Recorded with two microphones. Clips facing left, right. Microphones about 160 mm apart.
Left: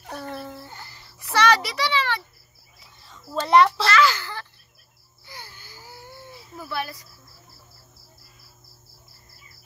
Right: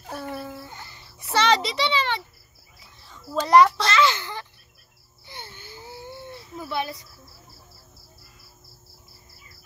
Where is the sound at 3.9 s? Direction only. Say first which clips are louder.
Left 1 dB; 25° right (ahead or behind).